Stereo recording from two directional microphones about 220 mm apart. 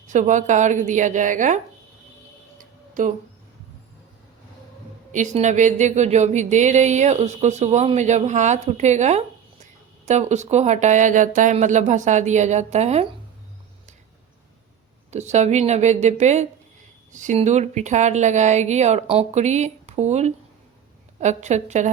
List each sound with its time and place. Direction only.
0.1 s speech: 35° right (ahead or behind)
2.6 s a sound: 35° right (ahead or behind)
5.1 s speech: 35° right (ahead or behind)
15.1 s speech: 30° right (ahead or behind)